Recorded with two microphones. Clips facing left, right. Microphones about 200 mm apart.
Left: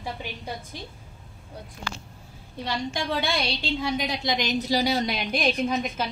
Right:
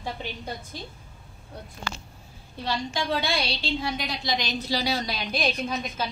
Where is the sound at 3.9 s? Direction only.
15° left (ahead or behind).